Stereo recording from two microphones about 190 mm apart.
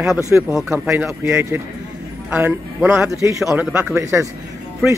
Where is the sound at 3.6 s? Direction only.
5° right (ahead or behind).